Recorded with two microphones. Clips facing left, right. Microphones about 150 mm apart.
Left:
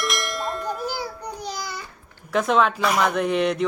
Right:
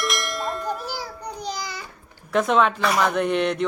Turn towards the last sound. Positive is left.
turn(degrees=0)  # may be behind; listen again after turning